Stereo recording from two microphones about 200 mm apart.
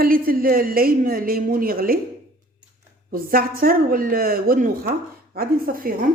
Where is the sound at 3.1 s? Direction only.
45° right (ahead or behind).